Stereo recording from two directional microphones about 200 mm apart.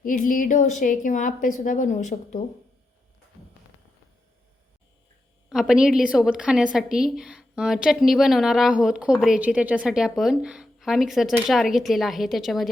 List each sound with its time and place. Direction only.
0.0 s a woman's voice: 40° left (ahead or behind)
5.5 s a woman's voice: centre (ahead or behind)